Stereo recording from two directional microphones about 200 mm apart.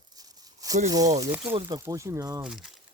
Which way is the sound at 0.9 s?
15° right (ahead or behind).